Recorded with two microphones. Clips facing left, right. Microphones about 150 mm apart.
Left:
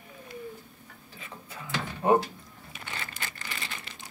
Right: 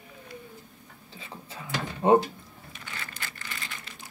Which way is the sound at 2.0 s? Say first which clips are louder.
Right 3 dB; 25° right (ahead or behind).